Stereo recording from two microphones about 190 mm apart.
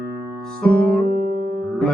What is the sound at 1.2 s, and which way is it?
Music, 40° left (ahead or behind).